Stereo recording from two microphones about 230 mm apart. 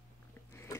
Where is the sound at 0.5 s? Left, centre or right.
Centre.